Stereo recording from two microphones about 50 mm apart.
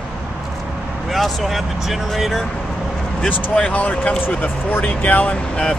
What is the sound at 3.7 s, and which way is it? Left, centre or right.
Speech, left.